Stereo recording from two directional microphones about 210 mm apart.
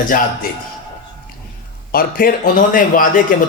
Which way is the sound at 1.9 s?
45° left (ahead or behind).